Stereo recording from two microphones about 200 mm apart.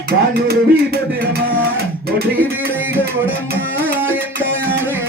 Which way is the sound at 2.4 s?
10° right (ahead or behind).